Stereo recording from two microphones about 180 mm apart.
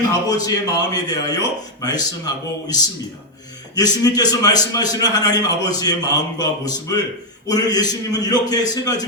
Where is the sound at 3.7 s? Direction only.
20° left (ahead or behind).